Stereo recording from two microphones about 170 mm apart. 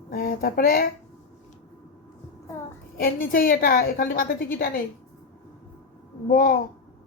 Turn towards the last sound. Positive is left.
turn(degrees=60)  # may be behind; listen again after turning